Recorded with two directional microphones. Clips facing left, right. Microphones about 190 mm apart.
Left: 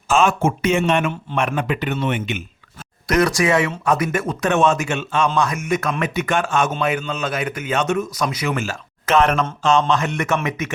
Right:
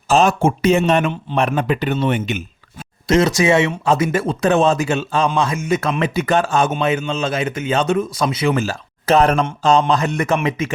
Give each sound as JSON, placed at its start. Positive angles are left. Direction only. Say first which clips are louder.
{"t": 0.1, "sound": "speech", "louder": "right 3 dB", "side_deg": -35}
{"t": 3.1, "sound": "speech", "louder": "right 3 dB", "side_deg": -25}